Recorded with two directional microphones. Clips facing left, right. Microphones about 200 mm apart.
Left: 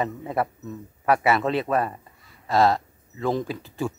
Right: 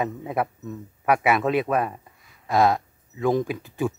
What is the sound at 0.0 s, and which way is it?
A man's voice, 5° right (ahead or behind).